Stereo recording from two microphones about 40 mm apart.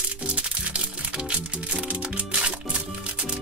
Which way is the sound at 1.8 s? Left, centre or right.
Right.